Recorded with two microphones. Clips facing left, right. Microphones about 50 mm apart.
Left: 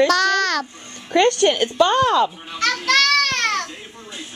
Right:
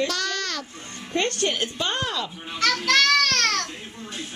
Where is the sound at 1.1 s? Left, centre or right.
Left.